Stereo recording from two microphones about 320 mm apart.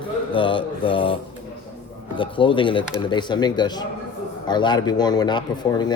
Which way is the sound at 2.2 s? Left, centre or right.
Centre.